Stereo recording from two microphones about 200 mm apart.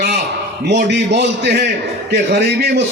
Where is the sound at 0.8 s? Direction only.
55° right (ahead or behind).